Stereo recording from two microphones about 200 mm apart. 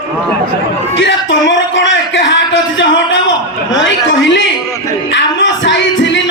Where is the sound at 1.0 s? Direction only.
65° left (ahead or behind).